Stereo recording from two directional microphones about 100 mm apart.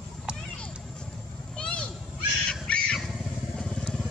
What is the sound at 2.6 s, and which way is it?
Motorcycle, 10° left (ahead or behind).